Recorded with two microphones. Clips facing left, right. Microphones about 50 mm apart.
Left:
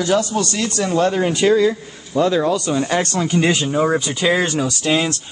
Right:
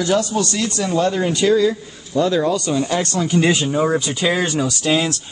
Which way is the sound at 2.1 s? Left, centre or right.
Centre.